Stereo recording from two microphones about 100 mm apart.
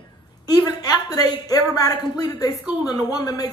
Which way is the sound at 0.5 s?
40° left (ahead or behind).